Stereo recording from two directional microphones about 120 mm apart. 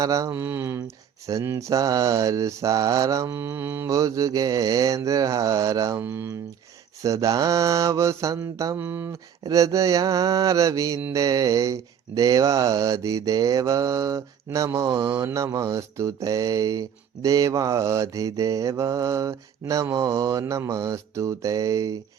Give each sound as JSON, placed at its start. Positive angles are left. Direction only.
{"t": 0.0, "sound": "mantra", "side_deg": -25}
{"t": 6.0, "sound": "speech", "side_deg": -15}
{"t": 7.0, "sound": "mantra", "side_deg": -25}
{"t": 8.8, "sound": "speech", "side_deg": -15}
{"t": 9.4, "sound": "mantra", "side_deg": -30}